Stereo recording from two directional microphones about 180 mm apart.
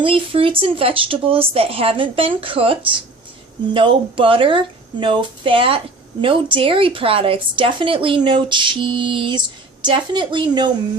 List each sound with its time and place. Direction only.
0.0 s speech: 30° right (ahead or behind)